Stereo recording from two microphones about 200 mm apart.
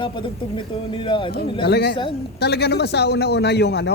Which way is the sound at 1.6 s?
55° left (ahead or behind).